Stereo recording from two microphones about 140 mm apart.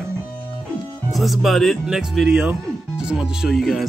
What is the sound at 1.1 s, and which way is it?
Speech, centre (ahead or behind).